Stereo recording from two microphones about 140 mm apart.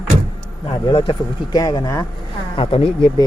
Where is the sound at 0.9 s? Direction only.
40° left (ahead or behind).